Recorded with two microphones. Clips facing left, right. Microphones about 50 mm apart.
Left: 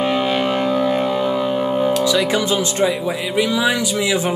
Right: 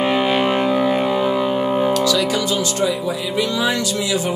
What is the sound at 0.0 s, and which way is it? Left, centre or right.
Music, centre.